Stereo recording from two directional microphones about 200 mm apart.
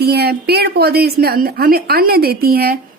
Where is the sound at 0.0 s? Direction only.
50° right (ahead or behind).